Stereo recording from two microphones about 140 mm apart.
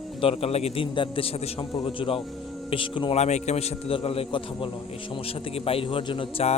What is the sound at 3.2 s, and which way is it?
A man's voice, 55° left (ahead or behind).